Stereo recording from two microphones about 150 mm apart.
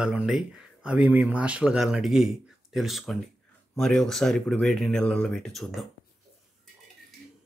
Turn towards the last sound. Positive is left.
turn(degrees=0)  # may be behind; listen again after turning